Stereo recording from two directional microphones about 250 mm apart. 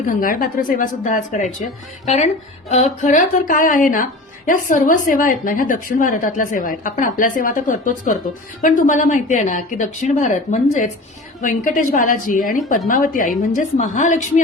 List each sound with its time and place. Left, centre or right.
0.1 s a woman's voice: left